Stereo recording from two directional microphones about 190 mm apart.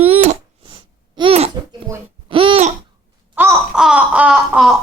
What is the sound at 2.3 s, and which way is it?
Babbling, 30° right (ahead or behind).